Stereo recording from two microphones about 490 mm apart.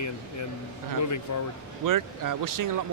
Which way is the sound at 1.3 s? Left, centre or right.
Left.